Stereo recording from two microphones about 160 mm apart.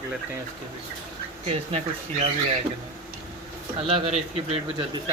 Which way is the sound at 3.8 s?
40° right (ahead or behind).